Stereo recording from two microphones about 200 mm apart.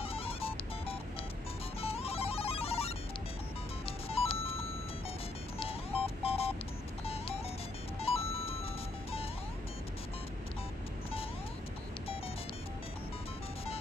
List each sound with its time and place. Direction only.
0.0 s music: 30° left (ahead or behind)
4.1 s telephone dialing: 30° left (ahead or behind)
5.6 s a sound: 30° left (ahead or behind)
8.0 s music: 30° left (ahead or behind)